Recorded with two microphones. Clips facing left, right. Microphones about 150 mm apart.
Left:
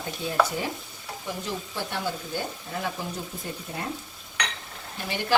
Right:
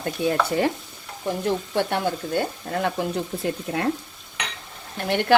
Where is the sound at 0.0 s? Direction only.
65° right (ahead or behind).